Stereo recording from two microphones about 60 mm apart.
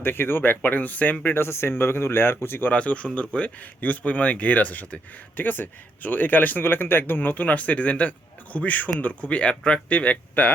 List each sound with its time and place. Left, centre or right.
0.0 s speech: left
1.2 s speech: left
2.7 s speech: left